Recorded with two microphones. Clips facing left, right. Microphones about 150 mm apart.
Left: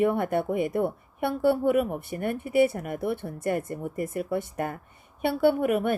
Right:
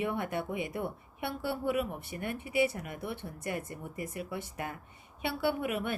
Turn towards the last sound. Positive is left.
turn(degrees=50)  # may be behind; listen again after turning